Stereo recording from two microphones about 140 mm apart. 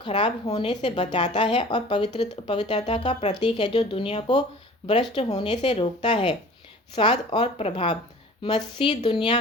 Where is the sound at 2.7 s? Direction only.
50° left (ahead or behind).